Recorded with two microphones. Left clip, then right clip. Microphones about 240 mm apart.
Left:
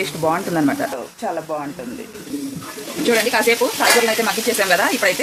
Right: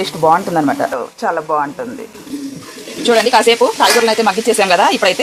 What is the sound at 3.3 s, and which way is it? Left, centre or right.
Speech, centre.